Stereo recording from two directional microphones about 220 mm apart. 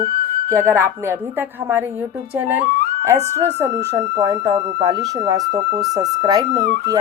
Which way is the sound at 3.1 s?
10° right (ahead or behind).